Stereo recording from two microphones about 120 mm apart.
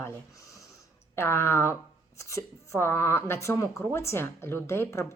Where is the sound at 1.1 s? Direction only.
20° left (ahead or behind).